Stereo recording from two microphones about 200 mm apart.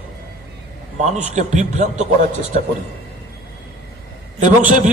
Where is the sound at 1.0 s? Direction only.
35° right (ahead or behind).